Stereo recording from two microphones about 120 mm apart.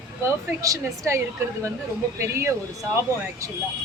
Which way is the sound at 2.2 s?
25° right (ahead or behind).